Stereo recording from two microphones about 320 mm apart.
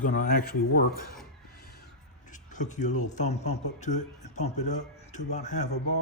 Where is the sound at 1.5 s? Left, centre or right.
Left.